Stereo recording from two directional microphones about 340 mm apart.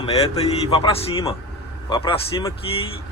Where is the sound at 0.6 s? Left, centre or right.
Centre.